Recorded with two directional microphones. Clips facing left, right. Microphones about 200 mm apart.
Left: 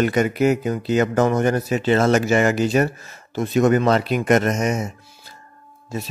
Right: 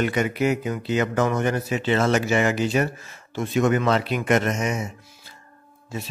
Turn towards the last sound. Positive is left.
turn(degrees=40)  # may be behind; listen again after turning